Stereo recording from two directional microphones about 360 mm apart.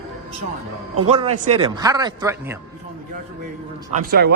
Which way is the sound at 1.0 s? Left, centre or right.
Centre.